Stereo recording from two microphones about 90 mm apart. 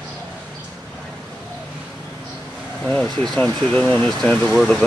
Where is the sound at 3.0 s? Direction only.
5° left (ahead or behind).